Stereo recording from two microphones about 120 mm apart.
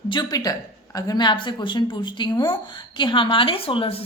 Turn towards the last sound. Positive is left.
turn(degrees=50)  # may be behind; listen again after turning